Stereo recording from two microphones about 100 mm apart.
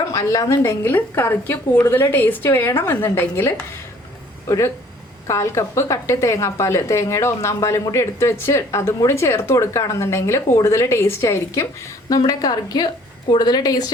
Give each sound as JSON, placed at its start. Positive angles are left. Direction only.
{"t": 0.1, "sound": "a woman's voice", "side_deg": 35}
{"t": 12.0, "sound": "a woman's voice", "side_deg": 40}